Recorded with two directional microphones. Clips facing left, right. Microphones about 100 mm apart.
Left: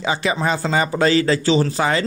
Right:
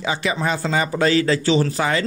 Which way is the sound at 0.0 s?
30° left (ahead or behind).